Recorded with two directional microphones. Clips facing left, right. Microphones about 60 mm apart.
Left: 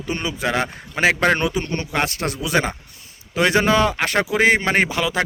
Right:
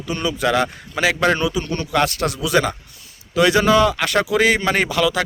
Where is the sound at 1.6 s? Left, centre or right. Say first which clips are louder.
Right 3 dB; left.